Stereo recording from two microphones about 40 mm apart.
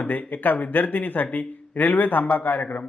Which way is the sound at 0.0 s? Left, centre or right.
Left.